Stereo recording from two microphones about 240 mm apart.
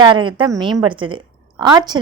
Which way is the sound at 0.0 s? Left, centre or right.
Centre.